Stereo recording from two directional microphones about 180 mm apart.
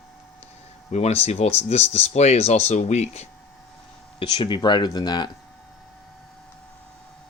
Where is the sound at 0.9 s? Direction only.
35° left (ahead or behind).